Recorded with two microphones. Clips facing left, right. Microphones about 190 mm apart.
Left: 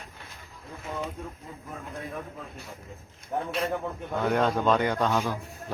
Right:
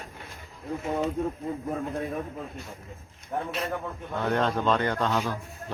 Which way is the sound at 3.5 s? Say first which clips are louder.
Left 2 dB; centre (ahead or behind).